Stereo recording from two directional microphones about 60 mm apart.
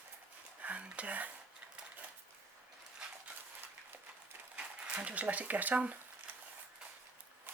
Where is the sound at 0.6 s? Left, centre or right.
Right.